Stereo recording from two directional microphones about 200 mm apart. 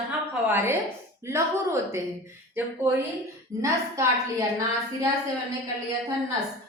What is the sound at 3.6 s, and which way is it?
Speech, 15° right (ahead or behind).